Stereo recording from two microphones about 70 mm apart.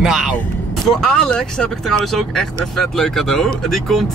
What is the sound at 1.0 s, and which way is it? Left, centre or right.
Speech, centre.